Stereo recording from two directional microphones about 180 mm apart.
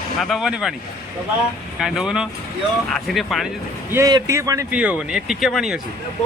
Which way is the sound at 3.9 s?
20° right (ahead or behind).